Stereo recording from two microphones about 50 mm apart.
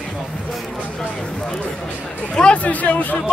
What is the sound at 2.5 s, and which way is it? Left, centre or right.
Speech, left.